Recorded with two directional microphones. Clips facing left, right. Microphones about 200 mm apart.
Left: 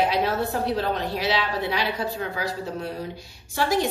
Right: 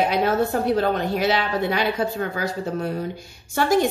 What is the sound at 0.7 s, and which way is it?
A woman's voice, 50° right (ahead or behind).